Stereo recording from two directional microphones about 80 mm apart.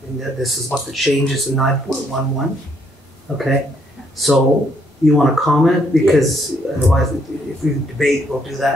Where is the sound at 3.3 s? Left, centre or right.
Centre.